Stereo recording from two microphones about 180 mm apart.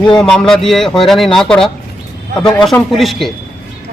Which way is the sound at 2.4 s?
25° left (ahead or behind).